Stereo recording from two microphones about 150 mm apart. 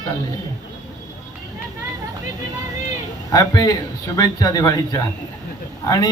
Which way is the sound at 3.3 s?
25° left (ahead or behind).